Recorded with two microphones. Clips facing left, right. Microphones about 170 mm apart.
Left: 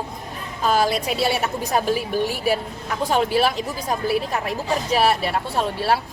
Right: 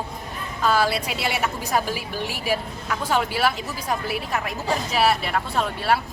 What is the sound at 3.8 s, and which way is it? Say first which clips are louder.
Speech: left 4 dB; 35° left (ahead or behind).